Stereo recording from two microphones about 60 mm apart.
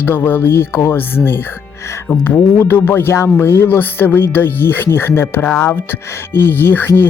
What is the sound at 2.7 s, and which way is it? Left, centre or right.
Speech, left.